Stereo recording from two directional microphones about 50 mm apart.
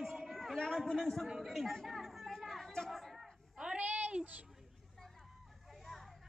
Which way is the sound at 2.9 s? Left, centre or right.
Centre.